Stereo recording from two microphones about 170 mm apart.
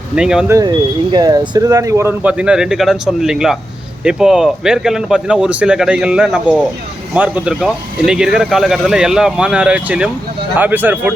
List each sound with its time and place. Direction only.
0.2 s speech: 5° right (ahead or behind)
0.4 s speech: 15° right (ahead or behind)